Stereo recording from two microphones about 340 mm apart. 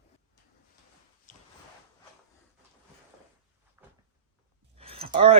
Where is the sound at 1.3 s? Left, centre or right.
Left.